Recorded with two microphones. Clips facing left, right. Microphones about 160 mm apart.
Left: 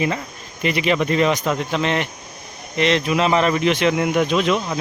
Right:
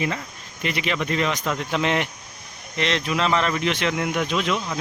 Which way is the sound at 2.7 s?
5° left (ahead or behind).